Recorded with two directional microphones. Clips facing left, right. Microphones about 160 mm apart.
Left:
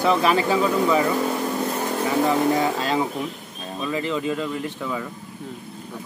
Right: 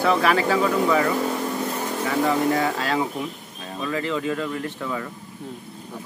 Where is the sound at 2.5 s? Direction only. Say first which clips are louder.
Left 1 dB; 20° left (ahead or behind).